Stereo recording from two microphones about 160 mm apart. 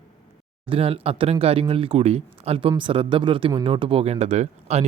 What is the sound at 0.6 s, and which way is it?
Speech, 35° right (ahead or behind).